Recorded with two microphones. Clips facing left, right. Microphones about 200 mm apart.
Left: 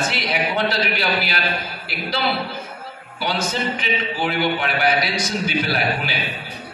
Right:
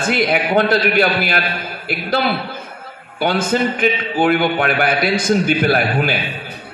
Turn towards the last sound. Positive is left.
turn(degrees=-50)  # may be behind; listen again after turning